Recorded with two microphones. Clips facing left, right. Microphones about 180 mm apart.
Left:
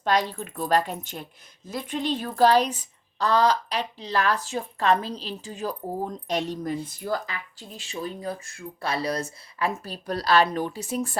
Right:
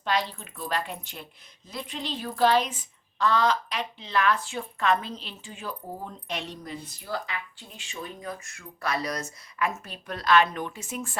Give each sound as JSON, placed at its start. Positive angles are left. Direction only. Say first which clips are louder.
{"t": 0.0, "sound": "a woman's voice", "louder": "left 4 dB", "side_deg": 45}